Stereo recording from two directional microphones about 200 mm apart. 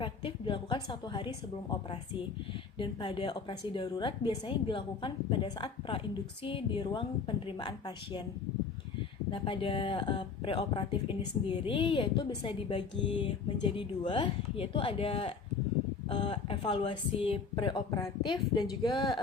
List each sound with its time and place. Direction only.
0.0 s a woman's voice: 25° left (ahead or behind)
2.7 s a woman's voice: 25° left (ahead or behind)
9.3 s a woman's voice: 25° left (ahead or behind)